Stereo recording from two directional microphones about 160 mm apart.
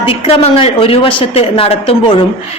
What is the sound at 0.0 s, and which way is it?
A woman's voice, 35° left (ahead or behind).